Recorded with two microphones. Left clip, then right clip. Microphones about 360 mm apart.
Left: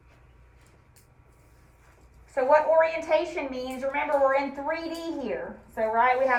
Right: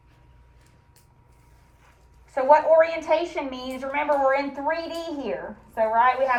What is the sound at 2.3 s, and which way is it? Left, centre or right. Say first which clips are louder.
A woman's voice: right 4 dB; centre.